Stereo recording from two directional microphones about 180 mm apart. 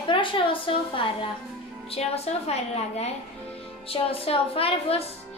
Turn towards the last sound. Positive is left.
turn(degrees=30)  # may be behind; listen again after turning